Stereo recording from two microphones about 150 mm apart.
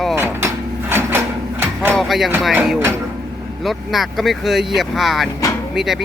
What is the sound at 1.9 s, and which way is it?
Speech, centre (ahead or behind).